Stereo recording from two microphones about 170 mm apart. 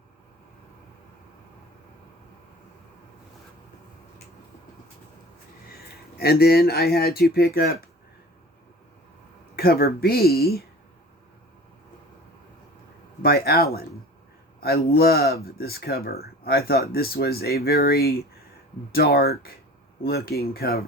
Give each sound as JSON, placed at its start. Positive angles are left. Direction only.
{"t": 6.1, "sound": "speech", "side_deg": 65}
{"t": 9.6, "sound": "speech", "side_deg": 65}
{"t": 13.2, "sound": "speech", "side_deg": 65}